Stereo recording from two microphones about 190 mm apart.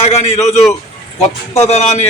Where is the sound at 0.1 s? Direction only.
35° left (ahead or behind).